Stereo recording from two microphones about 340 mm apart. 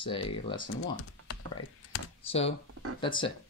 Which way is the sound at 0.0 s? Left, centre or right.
Centre.